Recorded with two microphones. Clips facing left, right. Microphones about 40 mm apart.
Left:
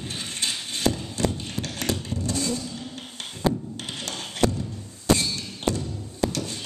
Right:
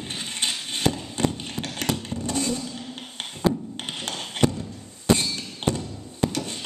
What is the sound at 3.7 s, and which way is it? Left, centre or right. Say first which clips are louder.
Music: right 1 dB; right.